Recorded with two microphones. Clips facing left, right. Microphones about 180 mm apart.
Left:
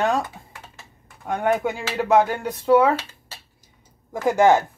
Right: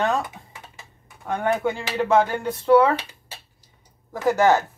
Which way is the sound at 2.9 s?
15° right (ahead or behind).